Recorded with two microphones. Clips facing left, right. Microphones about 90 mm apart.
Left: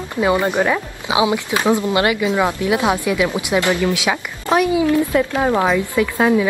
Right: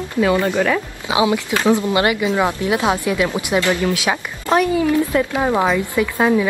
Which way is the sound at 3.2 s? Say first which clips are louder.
Left 1 dB; 15° left (ahead or behind).